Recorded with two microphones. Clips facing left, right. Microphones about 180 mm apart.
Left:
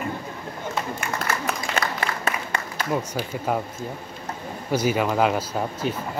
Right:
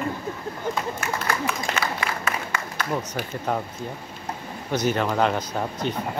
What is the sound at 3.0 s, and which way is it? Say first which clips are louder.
Speech: left 2 dB; 5° left (ahead or behind).